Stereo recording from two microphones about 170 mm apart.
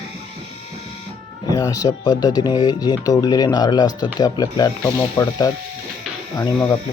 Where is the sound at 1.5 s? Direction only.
20° left (ahead or behind).